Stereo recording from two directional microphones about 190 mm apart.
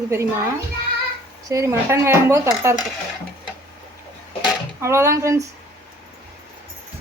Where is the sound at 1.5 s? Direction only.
15° right (ahead or behind).